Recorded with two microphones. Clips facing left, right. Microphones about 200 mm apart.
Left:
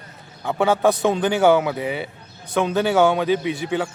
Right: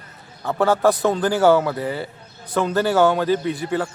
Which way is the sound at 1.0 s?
20° left (ahead or behind).